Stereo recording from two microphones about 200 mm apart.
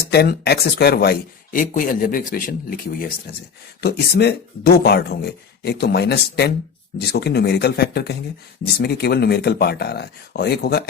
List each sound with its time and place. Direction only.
0.1 s speech: 55° left (ahead or behind)